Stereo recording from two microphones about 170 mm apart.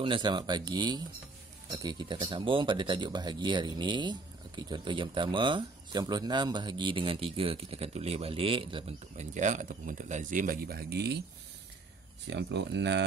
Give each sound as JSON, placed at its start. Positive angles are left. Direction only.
{"t": 0.0, "sound": "speech", "side_deg": -30}
{"t": 9.1, "sound": "speech", "side_deg": -45}
{"t": 12.3, "sound": "speech", "side_deg": -90}